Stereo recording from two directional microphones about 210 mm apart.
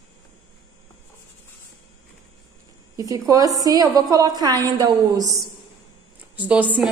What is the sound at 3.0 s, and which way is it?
A woman's voice, 15° right (ahead or behind).